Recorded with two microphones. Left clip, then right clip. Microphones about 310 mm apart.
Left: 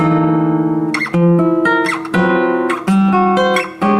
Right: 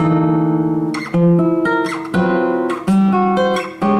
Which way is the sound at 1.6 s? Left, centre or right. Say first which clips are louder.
Left 3 dB; centre.